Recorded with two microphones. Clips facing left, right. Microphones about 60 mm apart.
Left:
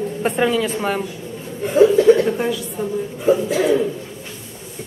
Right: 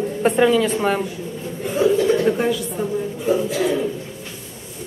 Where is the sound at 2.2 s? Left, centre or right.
Centre.